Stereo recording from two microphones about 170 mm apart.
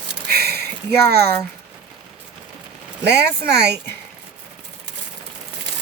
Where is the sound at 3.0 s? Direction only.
75° right (ahead or behind).